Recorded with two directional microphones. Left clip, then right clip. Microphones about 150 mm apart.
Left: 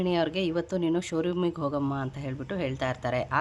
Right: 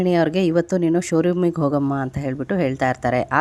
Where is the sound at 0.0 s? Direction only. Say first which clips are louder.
Right 9 dB; 45° right (ahead or behind).